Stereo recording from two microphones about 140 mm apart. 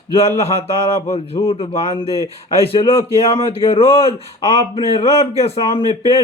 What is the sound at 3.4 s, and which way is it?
Speech, 40° left (ahead or behind).